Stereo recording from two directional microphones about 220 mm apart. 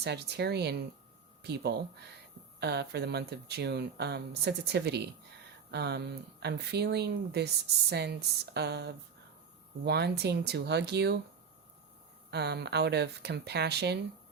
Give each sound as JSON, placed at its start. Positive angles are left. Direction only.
{"t": 0.0, "sound": "speech", "side_deg": -50}
{"t": 12.3, "sound": "speech", "side_deg": -50}